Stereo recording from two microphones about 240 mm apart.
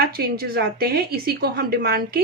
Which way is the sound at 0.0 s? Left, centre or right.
Right.